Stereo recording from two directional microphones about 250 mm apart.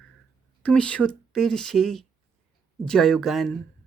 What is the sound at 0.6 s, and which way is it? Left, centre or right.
Speech, centre.